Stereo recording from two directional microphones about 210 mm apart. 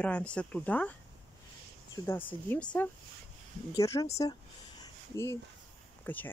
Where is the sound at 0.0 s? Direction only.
5° left (ahead or behind).